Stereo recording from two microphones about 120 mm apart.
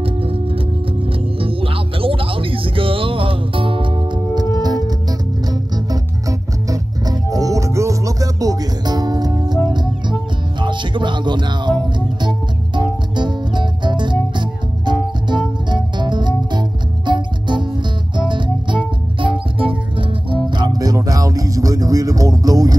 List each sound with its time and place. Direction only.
0.0 s music: 50° right (ahead or behind)
1.4 s music: 50° right (ahead or behind)
10.6 s music: 40° right (ahead or behind)